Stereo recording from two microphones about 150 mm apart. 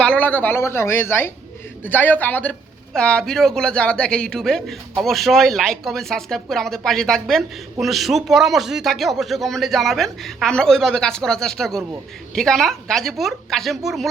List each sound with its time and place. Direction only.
0.0 s a woman's voice: 10° left (ahead or behind)